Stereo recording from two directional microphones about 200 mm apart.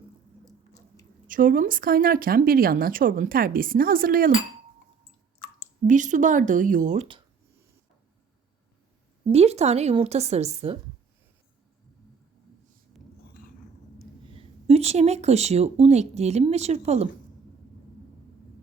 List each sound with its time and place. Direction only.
1.3 s a woman's voice: 45° right (ahead or behind)
5.9 s a woman's voice: 40° right (ahead or behind)
9.3 s a woman's voice: 30° right (ahead or behind)
14.3 s speech: 30° right (ahead or behind)